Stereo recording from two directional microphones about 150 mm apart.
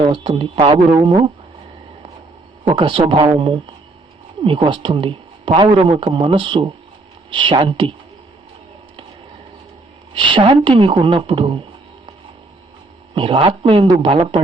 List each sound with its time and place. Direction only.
0.1 s speech: 30° right (ahead or behind)
2.6 s speech: 35° right (ahead or behind)
10.2 s speech: 30° right (ahead or behind)
13.1 s speech: 35° right (ahead or behind)